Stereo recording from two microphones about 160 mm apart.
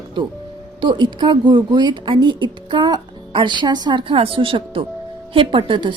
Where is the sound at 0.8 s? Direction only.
30° right (ahead or behind).